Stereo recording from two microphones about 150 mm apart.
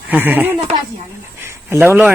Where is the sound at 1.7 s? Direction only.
15° right (ahead or behind).